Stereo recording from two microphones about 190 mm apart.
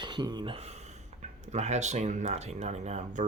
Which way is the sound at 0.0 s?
20° right (ahead or behind).